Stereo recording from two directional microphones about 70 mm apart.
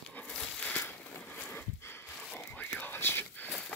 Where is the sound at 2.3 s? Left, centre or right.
Left.